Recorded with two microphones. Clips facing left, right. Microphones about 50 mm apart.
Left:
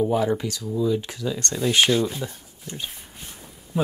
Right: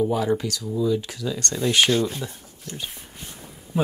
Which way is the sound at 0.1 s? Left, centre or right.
Centre.